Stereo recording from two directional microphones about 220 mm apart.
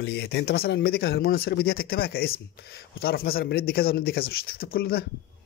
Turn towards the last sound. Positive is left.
turn(degrees=45)  # may be behind; listen again after turning